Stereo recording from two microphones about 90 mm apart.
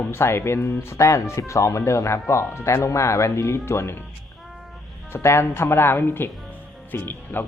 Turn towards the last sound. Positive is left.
turn(degrees=25)  # may be behind; listen again after turning